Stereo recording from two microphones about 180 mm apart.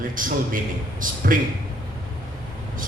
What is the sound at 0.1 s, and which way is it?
A man's voice, 50° right (ahead or behind).